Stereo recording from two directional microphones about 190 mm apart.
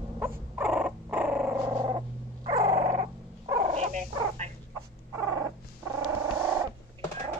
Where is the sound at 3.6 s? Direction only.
35° right (ahead or behind).